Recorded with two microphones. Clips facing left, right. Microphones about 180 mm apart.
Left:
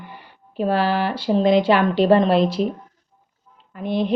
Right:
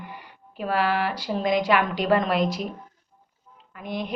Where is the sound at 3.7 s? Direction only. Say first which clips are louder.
Left 9 dB; 30° left (ahead or behind).